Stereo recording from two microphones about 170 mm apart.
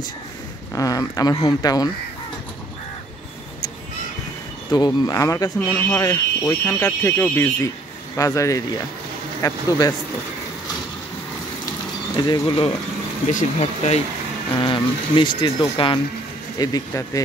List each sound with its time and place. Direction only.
0.7 s speech: 20° left (ahead or behind)
4.7 s speech: 25° left (ahead or behind)
12.3 s speech: 30° left (ahead or behind)
13.3 s speech: 45° left (ahead or behind)
14.5 s speech: 30° left (ahead or behind)